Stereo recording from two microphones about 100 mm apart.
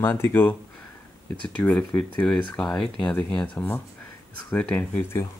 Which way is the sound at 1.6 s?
15° left (ahead or behind).